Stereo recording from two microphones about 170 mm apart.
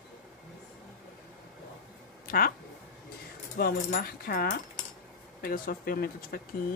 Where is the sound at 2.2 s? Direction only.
55° left (ahead or behind).